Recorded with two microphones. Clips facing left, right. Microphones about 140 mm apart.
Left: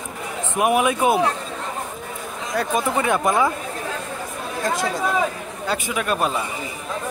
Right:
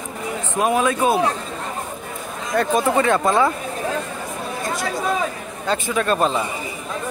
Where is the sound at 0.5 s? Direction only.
15° left (ahead or behind).